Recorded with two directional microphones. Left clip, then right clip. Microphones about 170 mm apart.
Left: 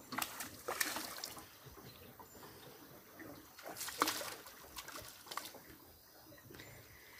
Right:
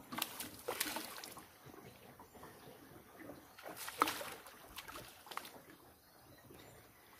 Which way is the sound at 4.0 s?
10° right (ahead or behind).